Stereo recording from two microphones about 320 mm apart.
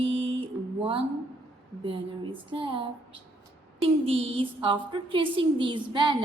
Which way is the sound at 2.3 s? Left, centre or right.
Centre.